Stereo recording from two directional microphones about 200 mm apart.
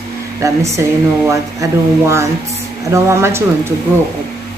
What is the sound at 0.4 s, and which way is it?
A woman's voice, 15° right (ahead or behind).